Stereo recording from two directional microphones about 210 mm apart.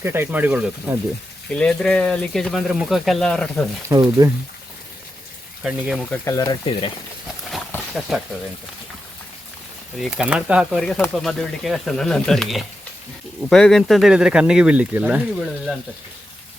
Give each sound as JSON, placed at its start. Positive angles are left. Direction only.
{"t": 0.0, "sound": "speech", "side_deg": -10}
{"t": 1.5, "sound": "speech", "side_deg": 5}
{"t": 3.8, "sound": "speech", "side_deg": -15}
{"t": 5.6, "sound": "speech", "side_deg": -5}
{"t": 6.2, "sound": "speech", "side_deg": 15}
{"t": 7.5, "sound": "wild animals", "side_deg": 0}
{"t": 10.0, "sound": "speech", "side_deg": -5}